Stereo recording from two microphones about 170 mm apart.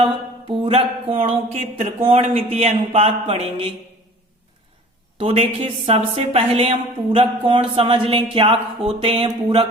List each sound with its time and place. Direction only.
0.0 s mantra: 30° right (ahead or behind)
1.8 s a woman's voice: 35° right (ahead or behind)
5.2 s a woman's voice: 35° right (ahead or behind)